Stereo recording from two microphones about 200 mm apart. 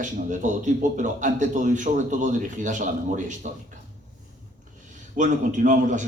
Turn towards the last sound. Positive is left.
turn(degrees=-40)  # may be behind; listen again after turning